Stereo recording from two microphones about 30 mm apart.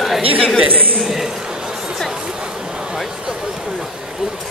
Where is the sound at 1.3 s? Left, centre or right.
Right.